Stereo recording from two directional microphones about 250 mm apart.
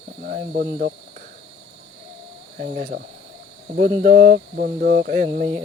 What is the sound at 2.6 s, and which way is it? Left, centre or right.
Cricket, right.